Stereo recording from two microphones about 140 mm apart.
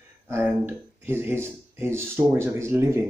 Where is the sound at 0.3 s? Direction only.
15° right (ahead or behind).